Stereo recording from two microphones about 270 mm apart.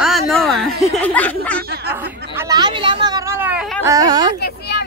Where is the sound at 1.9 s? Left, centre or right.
Centre.